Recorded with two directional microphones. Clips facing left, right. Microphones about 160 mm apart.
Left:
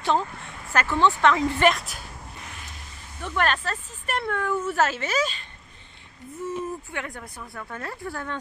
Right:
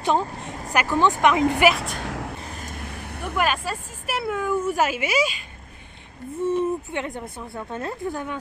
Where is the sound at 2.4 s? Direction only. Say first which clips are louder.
Right 7 dB; 40° right (ahead or behind); by 3.2 s 65° right (ahead or behind).